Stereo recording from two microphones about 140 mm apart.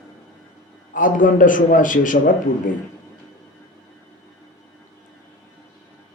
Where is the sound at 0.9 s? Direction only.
70° left (ahead or behind).